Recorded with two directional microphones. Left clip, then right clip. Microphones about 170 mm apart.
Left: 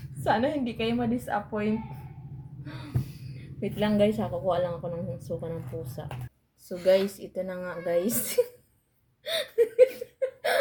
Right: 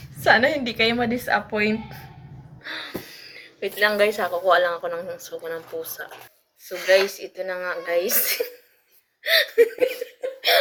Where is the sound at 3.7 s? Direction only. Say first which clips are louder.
Right 6 dB; 35° right (ahead or behind).